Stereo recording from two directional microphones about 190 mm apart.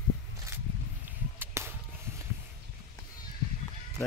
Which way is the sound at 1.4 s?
10° right (ahead or behind).